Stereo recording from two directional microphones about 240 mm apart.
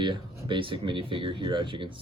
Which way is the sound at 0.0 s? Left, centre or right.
Centre.